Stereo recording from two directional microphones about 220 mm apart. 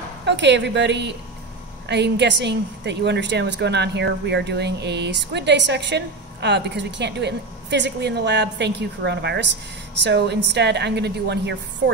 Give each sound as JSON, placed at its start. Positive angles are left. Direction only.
{"t": 0.3, "sound": "a woman's voice", "side_deg": -50}